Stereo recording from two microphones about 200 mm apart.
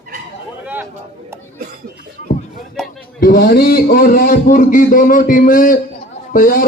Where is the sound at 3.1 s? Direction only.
50° left (ahead or behind).